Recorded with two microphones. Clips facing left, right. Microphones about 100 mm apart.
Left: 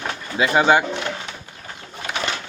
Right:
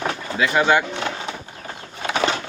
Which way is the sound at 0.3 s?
25° left (ahead or behind).